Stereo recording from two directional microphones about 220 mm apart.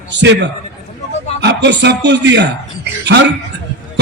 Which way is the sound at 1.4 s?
50° right (ahead or behind).